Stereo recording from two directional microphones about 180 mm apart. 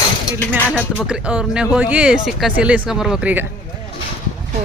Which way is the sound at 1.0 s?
5° right (ahead or behind).